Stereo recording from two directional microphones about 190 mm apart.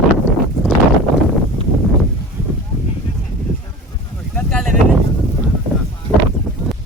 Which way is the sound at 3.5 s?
Centre (ahead or behind).